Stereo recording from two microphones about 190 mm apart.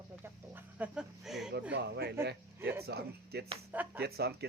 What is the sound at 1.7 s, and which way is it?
Speech, 60° right (ahead or behind).